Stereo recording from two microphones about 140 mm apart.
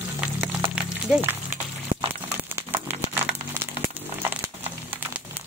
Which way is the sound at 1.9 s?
80° right.